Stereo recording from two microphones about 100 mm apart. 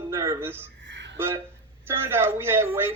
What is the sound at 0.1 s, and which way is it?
A man's voice, 30° right (ahead or behind).